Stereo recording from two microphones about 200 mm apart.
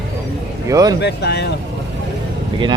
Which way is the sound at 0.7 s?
15° right (ahead or behind).